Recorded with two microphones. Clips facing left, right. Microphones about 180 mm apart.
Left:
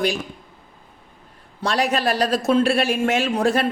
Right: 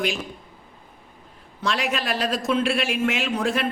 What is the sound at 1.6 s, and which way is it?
Speech, 40° left (ahead or behind).